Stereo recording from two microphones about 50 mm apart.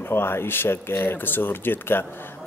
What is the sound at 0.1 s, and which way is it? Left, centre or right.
Speech, left.